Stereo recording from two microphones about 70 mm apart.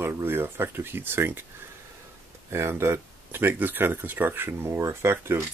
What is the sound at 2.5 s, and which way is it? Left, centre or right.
Speech, right.